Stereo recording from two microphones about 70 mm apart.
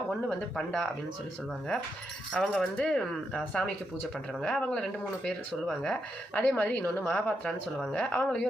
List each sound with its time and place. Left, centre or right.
0.3 s speech: centre
2.3 s speech: centre